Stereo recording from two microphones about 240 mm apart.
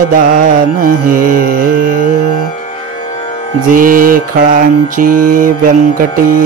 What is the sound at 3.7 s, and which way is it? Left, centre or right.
Music, right.